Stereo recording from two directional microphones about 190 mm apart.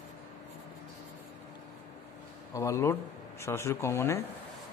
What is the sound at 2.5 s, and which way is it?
A man's voice, 15° left (ahead or behind).